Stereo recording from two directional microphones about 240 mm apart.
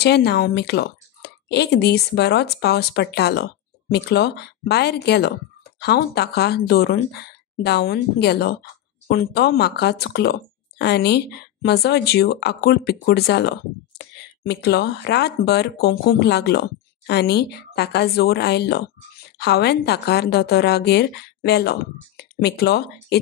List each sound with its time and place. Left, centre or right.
0.0 s speech: left